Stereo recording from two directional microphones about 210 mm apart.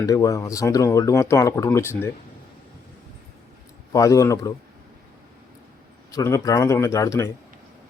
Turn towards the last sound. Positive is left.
turn(degrees=15)  # may be behind; listen again after turning